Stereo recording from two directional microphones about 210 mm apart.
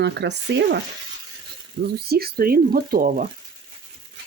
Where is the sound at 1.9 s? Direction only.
50° right (ahead or behind).